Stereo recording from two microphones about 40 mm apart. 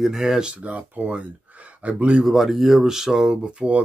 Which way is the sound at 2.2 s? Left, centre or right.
Centre.